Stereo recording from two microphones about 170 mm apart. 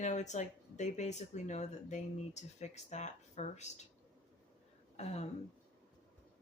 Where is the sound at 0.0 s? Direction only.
45° left (ahead or behind).